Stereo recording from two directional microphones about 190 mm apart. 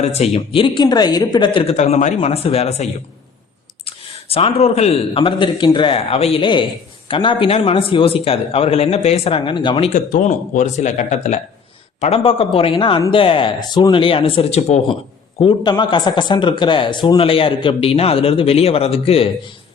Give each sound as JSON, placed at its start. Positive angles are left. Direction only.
{"t": 0.0, "sound": "speech", "side_deg": 35}
{"t": 3.8, "sound": "speech", "side_deg": 30}
{"t": 10.1, "sound": "speech", "side_deg": 45}